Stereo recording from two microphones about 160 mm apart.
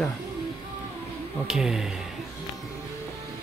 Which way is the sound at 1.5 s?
5° right (ahead or behind).